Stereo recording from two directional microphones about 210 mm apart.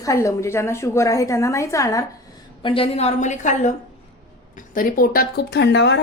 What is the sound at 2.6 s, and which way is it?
Speech, 25° left (ahead or behind).